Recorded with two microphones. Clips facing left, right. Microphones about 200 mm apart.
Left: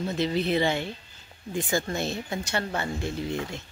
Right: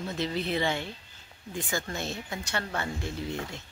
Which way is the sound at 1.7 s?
30° left (ahead or behind).